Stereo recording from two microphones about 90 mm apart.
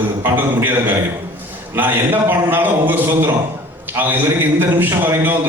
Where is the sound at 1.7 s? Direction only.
20° right (ahead or behind).